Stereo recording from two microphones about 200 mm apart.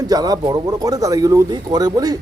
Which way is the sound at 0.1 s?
20° right (ahead or behind).